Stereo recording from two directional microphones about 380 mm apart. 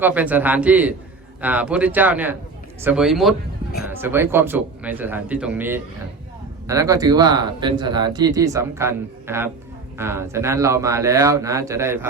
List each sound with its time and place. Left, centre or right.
0.0 s a man's voice: centre